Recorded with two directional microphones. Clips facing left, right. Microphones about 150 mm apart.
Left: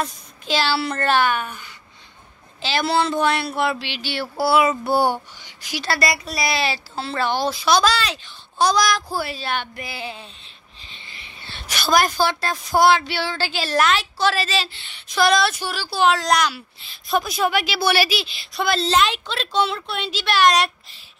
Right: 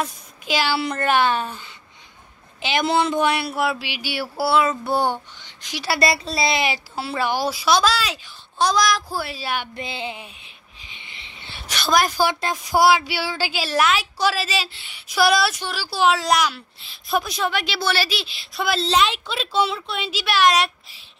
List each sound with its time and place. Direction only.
0.0 s a child's voice: 10° right (ahead or behind)
1.2 s speech: 30° right (ahead or behind)
2.6 s a woman's voice: 15° right (ahead or behind)
4.5 s a child's voice: 5° left (ahead or behind)
5.9 s a woman's voice: 25° right (ahead or behind); by 9.7 s 10° right (ahead or behind)
9.8 s a sound: 20° right (ahead or behind)
11.6 s a woman's voice: centre (ahead or behind)
12.2 s a woman's voice: 15° right (ahead or behind); by 18.2 s 10° left (ahead or behind)
18.2 s speech: centre (ahead or behind)